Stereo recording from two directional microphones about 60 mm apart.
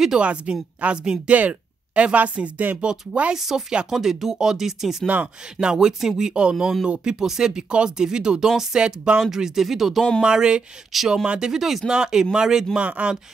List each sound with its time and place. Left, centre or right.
0.0 s speech: centre
3.3 s speech: centre
5.0 s speech: right
5.6 s speech: centre
6.5 s speech: centre
10.2 s speech: centre
10.9 s speech: centre
12.7 s speech: right